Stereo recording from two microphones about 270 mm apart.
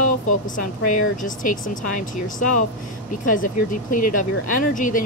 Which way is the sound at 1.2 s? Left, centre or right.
Left.